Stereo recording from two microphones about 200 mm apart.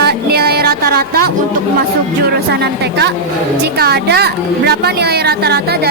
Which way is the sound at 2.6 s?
55° right (ahead or behind).